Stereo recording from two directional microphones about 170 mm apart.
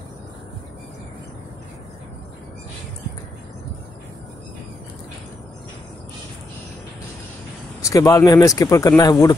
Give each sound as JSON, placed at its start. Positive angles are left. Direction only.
{"t": 7.9, "sound": "speech", "side_deg": 20}